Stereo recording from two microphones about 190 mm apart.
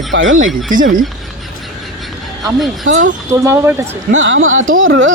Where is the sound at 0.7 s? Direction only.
45° right (ahead or behind).